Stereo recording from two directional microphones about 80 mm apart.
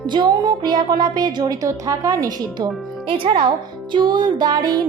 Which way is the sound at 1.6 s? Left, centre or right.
Right.